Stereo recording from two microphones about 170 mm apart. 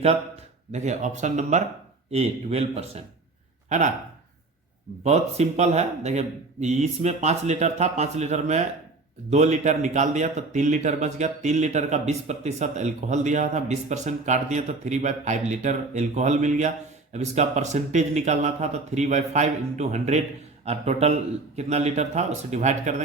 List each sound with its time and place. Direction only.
0.7 s speech: 45° right (ahead or behind)
5.0 s speech: 40° right (ahead or behind)